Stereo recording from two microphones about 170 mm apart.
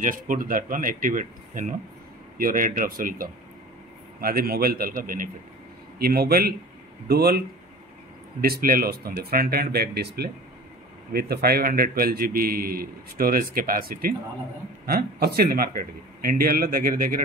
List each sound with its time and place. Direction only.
0.0 s a man's voice: 50° right (ahead or behind)